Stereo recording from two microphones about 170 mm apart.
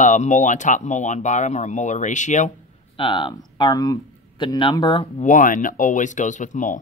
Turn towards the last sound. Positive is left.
turn(degrees=50)  # may be behind; listen again after turning